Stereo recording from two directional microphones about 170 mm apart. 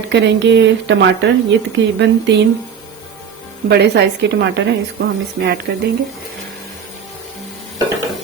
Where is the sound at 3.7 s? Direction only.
80° right.